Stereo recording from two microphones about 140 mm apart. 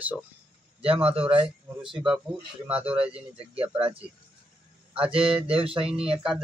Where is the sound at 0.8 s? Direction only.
40° right (ahead or behind).